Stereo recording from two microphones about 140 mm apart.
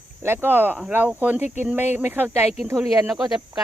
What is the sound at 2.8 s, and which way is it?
Speech, centre (ahead or behind).